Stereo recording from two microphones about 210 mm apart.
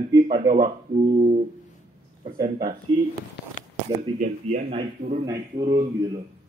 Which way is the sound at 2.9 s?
20° right (ahead or behind).